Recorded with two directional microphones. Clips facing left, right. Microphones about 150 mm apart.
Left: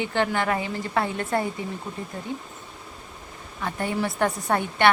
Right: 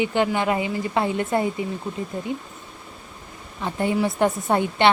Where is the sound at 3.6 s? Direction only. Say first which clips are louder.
Right 4 dB; 20° right (ahead or behind).